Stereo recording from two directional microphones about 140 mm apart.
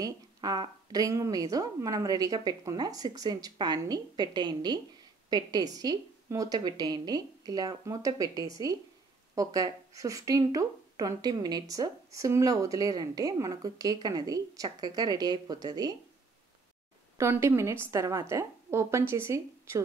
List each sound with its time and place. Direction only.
0.0 s speech: 30° right (ahead or behind)
17.2 s speech: 20° right (ahead or behind)